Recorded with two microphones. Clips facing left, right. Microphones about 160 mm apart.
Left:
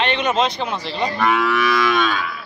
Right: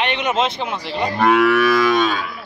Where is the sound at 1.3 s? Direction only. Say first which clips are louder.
Right 4 dB; 60° right (ahead or behind); by 2.1 s 40° right (ahead or behind).